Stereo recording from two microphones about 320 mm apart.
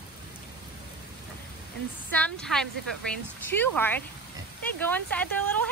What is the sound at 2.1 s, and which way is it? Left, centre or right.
A woman's voice, centre.